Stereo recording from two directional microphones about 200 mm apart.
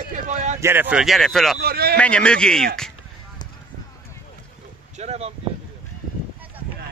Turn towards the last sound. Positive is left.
turn(degrees=-30)  # may be behind; listen again after turning